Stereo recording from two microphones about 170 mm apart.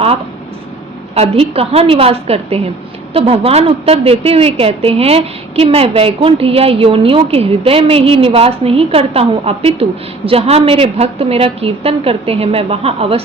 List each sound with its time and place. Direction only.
1.1 s a woman's voice: 35° right (ahead or behind)